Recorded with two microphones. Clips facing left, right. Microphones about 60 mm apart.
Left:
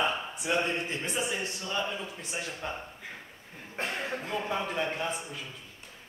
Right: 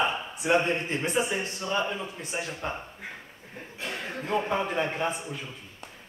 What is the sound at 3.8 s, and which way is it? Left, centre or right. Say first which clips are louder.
Speech: left 2 dB; left.